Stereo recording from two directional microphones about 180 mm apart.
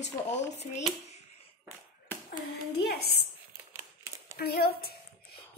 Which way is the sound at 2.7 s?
65° left (ahead or behind).